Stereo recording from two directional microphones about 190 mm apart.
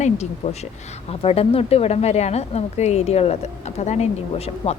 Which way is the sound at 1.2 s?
30° left (ahead or behind).